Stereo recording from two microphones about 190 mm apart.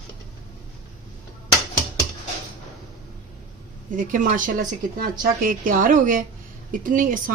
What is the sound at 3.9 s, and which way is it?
A woman's voice, 45° right (ahead or behind).